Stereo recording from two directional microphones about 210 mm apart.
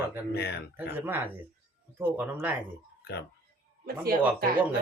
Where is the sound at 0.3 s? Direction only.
50° left (ahead or behind).